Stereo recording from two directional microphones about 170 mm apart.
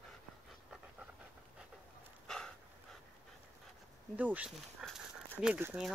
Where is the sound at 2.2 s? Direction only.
5° left (ahead or behind).